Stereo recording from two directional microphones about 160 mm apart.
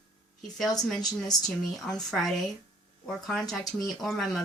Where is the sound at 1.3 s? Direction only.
25° left (ahead or behind).